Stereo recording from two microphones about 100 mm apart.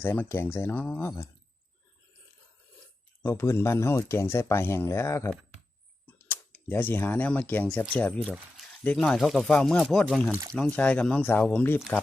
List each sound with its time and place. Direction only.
0.0 s speech: 20° left (ahead or behind)
3.2 s speech: 25° left (ahead or behind)